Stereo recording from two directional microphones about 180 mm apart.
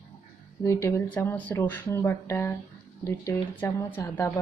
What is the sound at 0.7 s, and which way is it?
A woman's voice, 15° left (ahead or behind).